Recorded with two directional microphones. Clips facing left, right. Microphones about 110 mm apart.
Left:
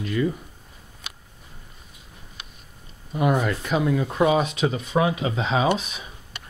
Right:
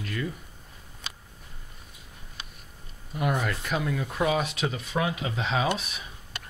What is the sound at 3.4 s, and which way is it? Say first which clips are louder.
Speech: left 6 dB; 5° left (ahead or behind).